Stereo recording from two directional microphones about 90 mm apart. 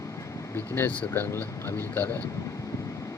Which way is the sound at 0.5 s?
25° left (ahead or behind).